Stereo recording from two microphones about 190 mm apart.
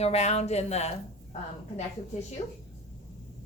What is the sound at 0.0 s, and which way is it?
A woman's voice, 35° left (ahead or behind).